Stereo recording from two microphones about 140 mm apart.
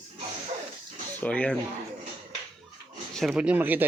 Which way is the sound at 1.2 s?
10° left (ahead or behind).